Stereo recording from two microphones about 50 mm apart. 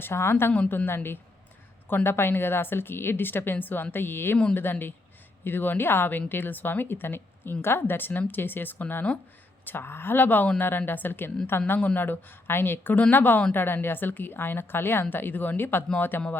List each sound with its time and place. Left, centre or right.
0.0 s a woman's voice: left